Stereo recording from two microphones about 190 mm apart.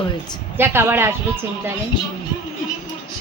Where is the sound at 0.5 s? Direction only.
10° right (ahead or behind).